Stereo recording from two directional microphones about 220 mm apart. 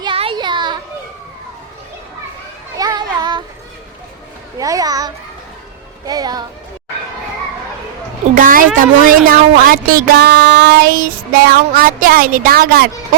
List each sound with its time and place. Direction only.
0.0 s a sound: 25° right (ahead or behind)
2.7 s children playing: 15° right (ahead or behind)
4.5 s a child's voice: 15° right (ahead or behind)
8.4 s speech: 40° right (ahead or behind)